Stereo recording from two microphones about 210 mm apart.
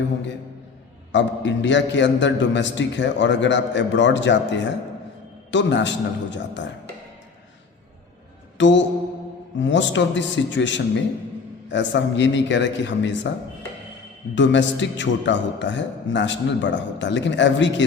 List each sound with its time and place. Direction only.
1.1 s a man's voice: 60° left (ahead or behind)
8.5 s mantra: 60° left (ahead or behind)
9.6 s a man's voice: 60° left (ahead or behind)
14.3 s a man's voice: 60° left (ahead or behind)